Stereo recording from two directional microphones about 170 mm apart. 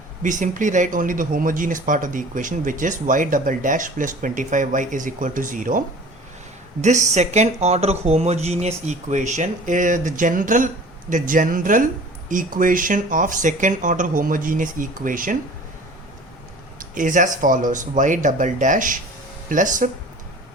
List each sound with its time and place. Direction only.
0.2 s speech: 50° right (ahead or behind)
6.8 s speech: 45° right (ahead or behind)
16.9 s speech: 50° right (ahead or behind)